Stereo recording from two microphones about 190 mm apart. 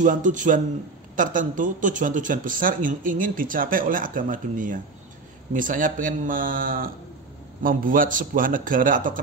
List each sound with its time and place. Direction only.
0.0 s speech: 40° right (ahead or behind)